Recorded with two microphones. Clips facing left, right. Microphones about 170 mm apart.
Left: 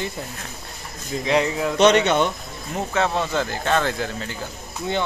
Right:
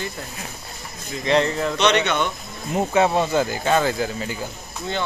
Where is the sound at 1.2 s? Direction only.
5° left (ahead or behind).